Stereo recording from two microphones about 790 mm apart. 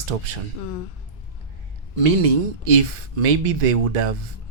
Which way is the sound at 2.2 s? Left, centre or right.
Right.